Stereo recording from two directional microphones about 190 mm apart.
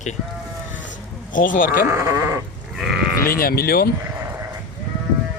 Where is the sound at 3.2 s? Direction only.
50° left (ahead or behind).